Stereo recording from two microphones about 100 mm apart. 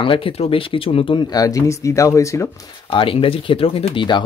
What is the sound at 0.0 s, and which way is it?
Speech, 60° left (ahead or behind).